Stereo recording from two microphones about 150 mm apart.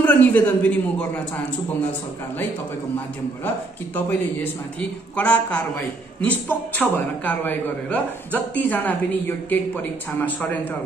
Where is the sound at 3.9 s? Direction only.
10° left (ahead or behind).